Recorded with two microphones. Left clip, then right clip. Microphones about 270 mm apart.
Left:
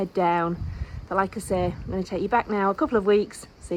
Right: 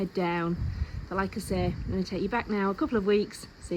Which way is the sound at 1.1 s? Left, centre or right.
Centre.